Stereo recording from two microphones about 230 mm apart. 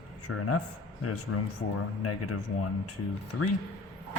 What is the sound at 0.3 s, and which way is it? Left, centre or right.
Speech, left.